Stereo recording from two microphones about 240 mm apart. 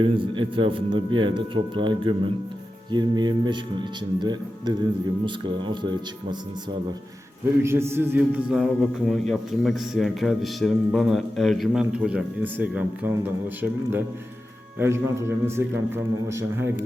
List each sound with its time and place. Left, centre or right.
0.0 s a man's voice: right
7.6 s a man's voice: centre